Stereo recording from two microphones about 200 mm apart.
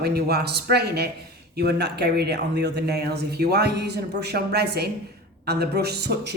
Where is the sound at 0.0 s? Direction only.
50° right (ahead or behind).